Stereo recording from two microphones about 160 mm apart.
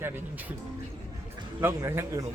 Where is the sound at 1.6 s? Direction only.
15° right (ahead or behind).